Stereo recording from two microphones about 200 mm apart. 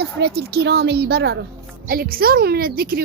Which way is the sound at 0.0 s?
55° right (ahead or behind).